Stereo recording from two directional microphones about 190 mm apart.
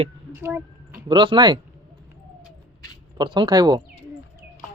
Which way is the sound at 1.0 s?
25° right (ahead or behind).